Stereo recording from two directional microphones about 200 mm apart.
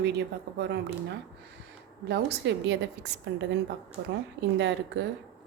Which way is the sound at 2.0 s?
60° right (ahead or behind).